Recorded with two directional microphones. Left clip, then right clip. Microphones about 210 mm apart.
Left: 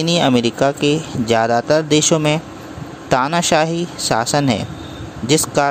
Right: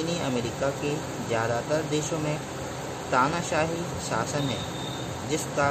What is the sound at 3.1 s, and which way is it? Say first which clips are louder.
Speech: left 10 dB; 45° left (ahead or behind).